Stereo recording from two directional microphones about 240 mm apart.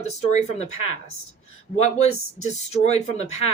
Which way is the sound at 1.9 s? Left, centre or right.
Left.